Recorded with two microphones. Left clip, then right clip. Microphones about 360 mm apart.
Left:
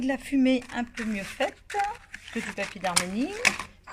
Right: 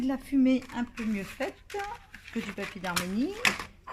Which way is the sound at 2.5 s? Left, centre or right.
Centre.